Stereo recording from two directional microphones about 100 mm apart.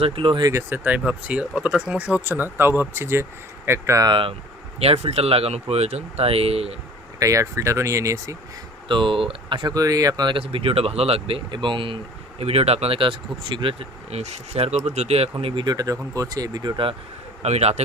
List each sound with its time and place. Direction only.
0.0 s speech: 60° right (ahead or behind)
0.7 s speech: 15° right (ahead or behind); by 4.1 s 30° right (ahead or behind)
4.1 s speech: 60° right (ahead or behind)
4.8 s speech: 80° right
7.2 s speech: 35° right (ahead or behind)
8.9 s speech: 60° right (ahead or behind)
9.7 s speech: 35° right (ahead or behind)
10.3 s speech: 65° right (ahead or behind)
12.4 s speech: 90° right; by 15.6 s 70° right (ahead or behind)
15.6 s speech: 40° right (ahead or behind)
17.4 s speech: 90° right